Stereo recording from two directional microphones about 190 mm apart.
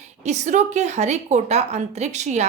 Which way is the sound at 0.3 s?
40° right (ahead or behind).